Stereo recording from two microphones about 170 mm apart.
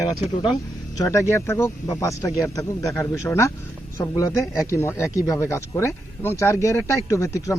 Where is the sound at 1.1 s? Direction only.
15° left (ahead or behind).